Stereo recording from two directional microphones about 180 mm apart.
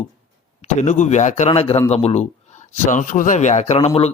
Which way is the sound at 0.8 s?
40° left (ahead or behind).